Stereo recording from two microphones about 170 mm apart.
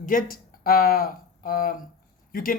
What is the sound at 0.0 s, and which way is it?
Speech, 50° left (ahead or behind).